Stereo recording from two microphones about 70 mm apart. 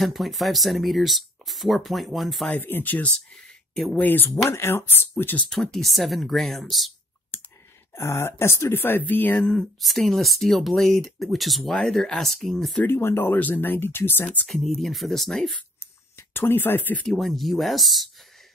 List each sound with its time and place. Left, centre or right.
0.0 s speech: centre
2.6 s speech: left
3.7 s speech: centre
4.0 s speech: left
5.5 s speech: centre
7.9 s speech: left; by 9.7 s centre
9.8 s speech: centre
12.8 s speech: left
14.2 s speech: centre
14.5 s speech: centre
15.8 s a sound: left
17.0 s speech: centre